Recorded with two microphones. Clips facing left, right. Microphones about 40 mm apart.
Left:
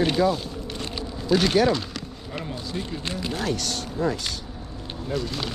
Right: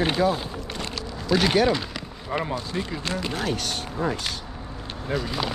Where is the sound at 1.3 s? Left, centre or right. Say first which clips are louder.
Even; centre.